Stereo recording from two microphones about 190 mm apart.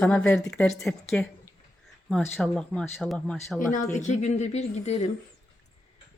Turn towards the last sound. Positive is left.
turn(degrees=35)  # may be behind; listen again after turning